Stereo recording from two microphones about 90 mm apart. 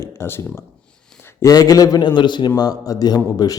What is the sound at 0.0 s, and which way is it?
Speech, 30° left (ahead or behind).